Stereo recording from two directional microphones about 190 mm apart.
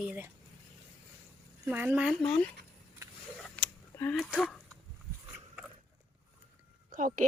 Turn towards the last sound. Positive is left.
turn(degrees=-45)  # may be behind; listen again after turning